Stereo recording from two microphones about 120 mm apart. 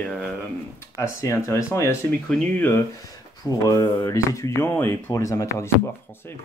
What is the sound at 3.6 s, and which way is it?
Speech, 25° left (ahead or behind).